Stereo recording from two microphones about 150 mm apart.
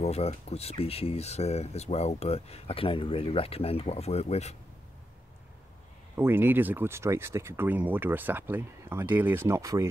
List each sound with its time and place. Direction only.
0.0 s speech: 45° left (ahead or behind)
6.1 s speech: 15° right (ahead or behind)